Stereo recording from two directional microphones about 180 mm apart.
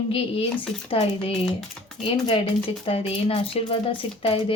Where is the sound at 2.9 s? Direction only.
30° left (ahead or behind).